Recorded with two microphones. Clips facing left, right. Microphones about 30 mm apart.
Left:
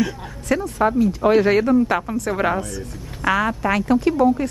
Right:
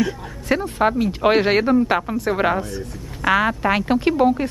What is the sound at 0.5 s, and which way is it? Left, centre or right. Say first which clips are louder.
A woman's voice: even; right.